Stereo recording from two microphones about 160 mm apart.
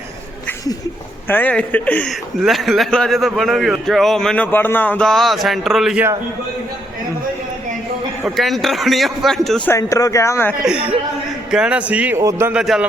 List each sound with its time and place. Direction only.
1.3 s a man's voice: 10° left (ahead or behind)
8.4 s a man's voice: centre (ahead or behind)
9.6 s speech: 20° left (ahead or behind)
11.5 s a man's voice: 5° right (ahead or behind)
12.6 s a man's voice: centre (ahead or behind)